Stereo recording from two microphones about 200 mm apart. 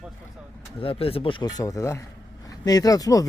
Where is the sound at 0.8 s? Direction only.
30° left (ahead or behind).